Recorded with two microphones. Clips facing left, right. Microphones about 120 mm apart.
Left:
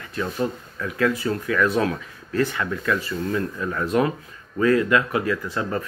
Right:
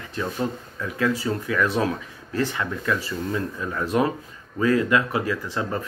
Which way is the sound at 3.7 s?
15° right (ahead or behind).